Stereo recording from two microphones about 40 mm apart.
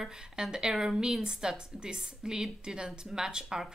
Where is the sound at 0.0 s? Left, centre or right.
Centre.